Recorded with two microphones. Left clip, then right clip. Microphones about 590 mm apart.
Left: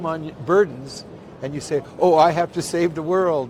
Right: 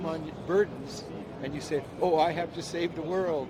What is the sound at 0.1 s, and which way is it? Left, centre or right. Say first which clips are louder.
A man's voice: left 10 dB; left.